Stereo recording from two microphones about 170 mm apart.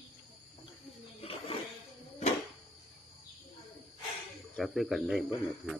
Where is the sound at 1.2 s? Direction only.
35° left (ahead or behind).